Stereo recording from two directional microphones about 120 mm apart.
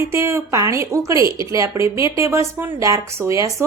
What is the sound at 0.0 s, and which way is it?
Speech, 25° right (ahead or behind).